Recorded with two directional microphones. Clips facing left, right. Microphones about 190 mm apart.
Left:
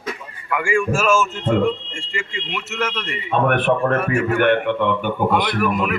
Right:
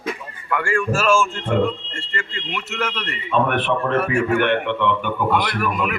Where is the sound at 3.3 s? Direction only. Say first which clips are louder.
Left 2 dB; 50° left (ahead or behind).